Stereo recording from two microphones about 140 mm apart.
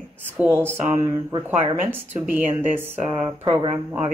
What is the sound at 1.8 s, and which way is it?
Speech, 15° right (ahead or behind).